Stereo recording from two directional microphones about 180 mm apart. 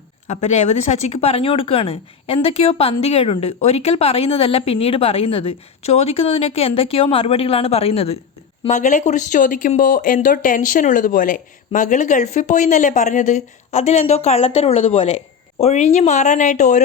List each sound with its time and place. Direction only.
0.3 s speech: 40° left (ahead or behind)
8.6 s speech: 45° left (ahead or behind)